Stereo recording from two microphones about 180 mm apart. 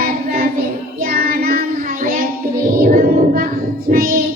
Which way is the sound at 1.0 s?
55° right (ahead or behind).